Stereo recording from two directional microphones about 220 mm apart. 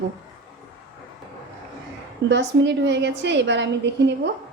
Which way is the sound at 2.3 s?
55° right (ahead or behind).